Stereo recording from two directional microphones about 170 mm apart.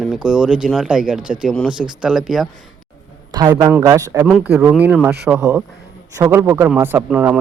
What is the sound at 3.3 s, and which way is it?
Speech, 20° right (ahead or behind).